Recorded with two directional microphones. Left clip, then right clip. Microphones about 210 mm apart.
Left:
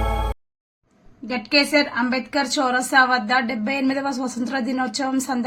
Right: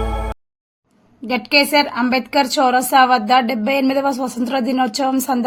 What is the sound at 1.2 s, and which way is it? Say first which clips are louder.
A woman's voice: right 4 dB; 35° right (ahead or behind).